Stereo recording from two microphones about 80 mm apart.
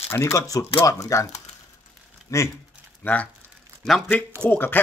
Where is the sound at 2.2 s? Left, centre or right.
Left.